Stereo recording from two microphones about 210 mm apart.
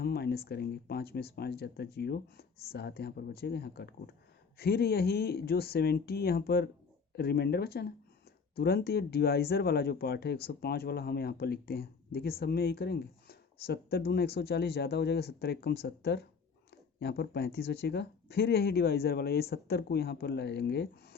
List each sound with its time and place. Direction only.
0.0 s speech: 50° left (ahead or behind)